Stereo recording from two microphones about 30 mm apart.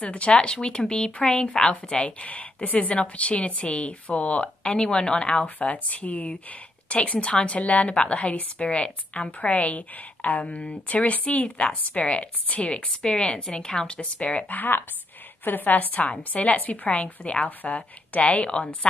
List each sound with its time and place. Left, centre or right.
0.0 s speech: left
2.1 s speech: left
4.7 s speech: left
5.3 s speech: left
6.9 s speech: left
11.5 s speech: left
15.4 s a woman's voice: left
16.9 s speech: left
17.5 s speech: left